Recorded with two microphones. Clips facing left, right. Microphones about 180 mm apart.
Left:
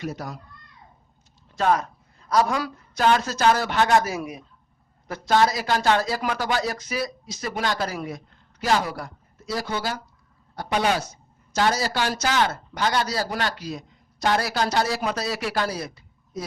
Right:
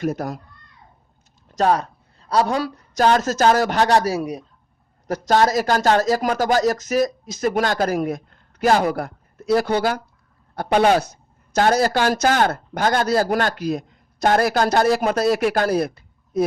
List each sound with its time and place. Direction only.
0.0 s speech: 50° right (ahead or behind)
1.5 s a man's voice: 35° right (ahead or behind); by 16.5 s 55° right (ahead or behind)